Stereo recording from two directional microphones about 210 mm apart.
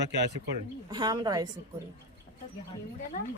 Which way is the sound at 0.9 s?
20° right (ahead or behind).